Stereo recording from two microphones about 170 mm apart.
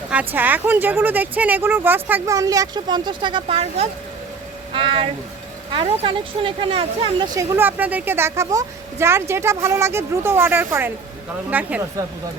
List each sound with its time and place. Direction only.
0.3 s a woman's voice: 10° right (ahead or behind); by 7.3 s 30° right (ahead or behind)
7.3 s a woman's voice: 15° right (ahead or behind)